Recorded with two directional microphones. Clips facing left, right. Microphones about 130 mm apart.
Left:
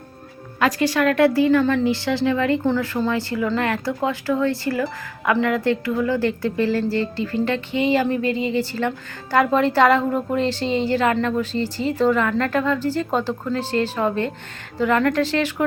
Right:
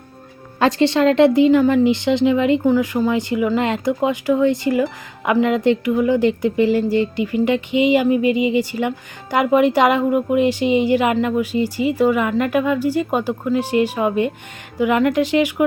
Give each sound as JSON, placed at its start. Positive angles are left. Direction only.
{"t": 0.6, "sound": "a woman's voice", "side_deg": -25}